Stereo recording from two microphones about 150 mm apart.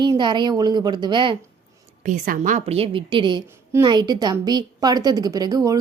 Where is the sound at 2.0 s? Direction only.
60° right (ahead or behind).